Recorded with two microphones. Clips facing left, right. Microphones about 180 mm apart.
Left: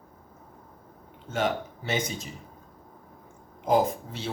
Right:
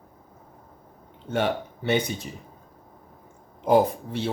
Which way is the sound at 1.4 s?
60° right (ahead or behind).